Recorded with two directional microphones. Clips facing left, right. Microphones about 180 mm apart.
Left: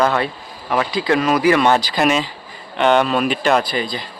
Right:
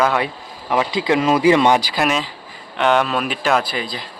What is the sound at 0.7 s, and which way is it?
Speech, 20° right (ahead or behind).